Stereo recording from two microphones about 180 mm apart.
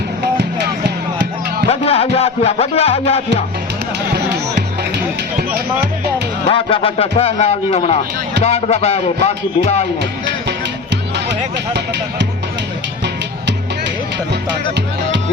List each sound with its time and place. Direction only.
1.7 s music: 35° left (ahead or behind)
5.4 s music: 60° right (ahead or behind)
6.5 s a man's voice: 30° left (ahead or behind)